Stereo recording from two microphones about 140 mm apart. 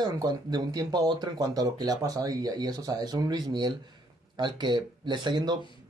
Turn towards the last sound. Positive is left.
turn(degrees=-30)  # may be behind; listen again after turning